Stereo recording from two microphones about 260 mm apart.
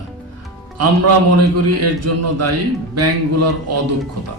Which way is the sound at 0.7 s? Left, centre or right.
Right.